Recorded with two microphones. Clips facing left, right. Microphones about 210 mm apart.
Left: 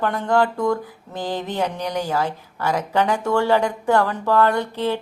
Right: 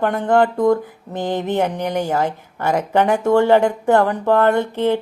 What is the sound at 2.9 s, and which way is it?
Mantra, 20° right (ahead or behind).